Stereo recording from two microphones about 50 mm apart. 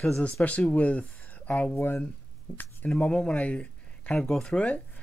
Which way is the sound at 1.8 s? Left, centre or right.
Left.